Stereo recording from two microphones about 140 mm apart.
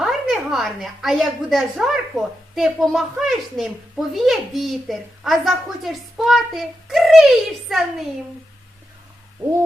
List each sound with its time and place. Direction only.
0.0 s a woman's voice: centre (ahead or behind)